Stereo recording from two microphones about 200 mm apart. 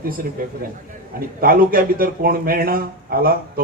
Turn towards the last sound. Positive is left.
turn(degrees=-45)  # may be behind; listen again after turning